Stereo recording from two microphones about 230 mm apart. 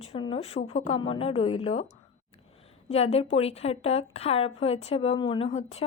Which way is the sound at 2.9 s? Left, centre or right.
Left.